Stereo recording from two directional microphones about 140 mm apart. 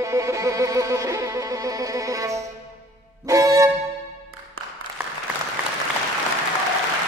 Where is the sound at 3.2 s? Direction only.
25° right (ahead or behind).